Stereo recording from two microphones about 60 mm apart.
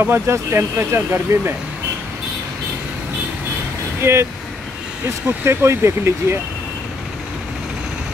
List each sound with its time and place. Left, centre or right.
0.0 s speech: right
4.0 s speech: right
5.4 s speech: right